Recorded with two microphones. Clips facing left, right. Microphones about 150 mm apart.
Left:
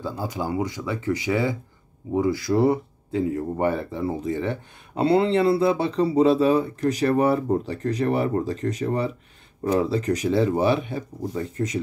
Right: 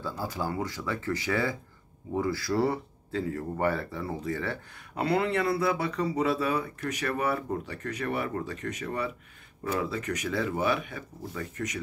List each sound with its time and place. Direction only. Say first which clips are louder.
0.0 s speech: left 4 dB; 15° left (ahead or behind)